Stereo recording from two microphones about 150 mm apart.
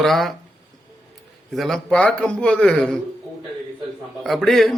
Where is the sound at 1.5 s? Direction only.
Centre (ahead or behind).